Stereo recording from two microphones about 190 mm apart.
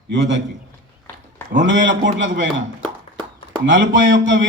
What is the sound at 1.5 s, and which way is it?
A man's voice, 75° right (ahead or behind).